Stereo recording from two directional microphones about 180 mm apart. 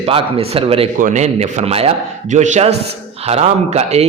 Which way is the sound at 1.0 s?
45° right (ahead or behind).